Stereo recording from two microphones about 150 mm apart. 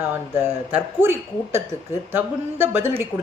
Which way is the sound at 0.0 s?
15° right (ahead or behind).